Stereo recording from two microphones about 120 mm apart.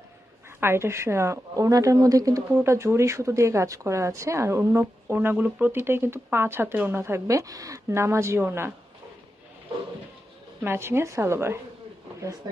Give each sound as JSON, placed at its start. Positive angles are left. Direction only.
{"t": 0.6, "sound": "a woman's voice", "side_deg": -20}
{"t": 10.6, "sound": "a woman's voice", "side_deg": -20}